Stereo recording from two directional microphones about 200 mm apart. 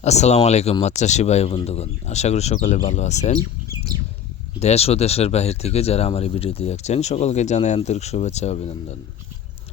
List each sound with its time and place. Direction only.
0.0 s speech: 35° left (ahead or behind)
4.6 s speech: 30° left (ahead or behind)